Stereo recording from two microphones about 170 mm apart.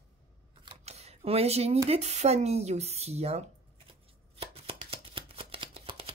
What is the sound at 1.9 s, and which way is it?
Speech, 40° right (ahead or behind).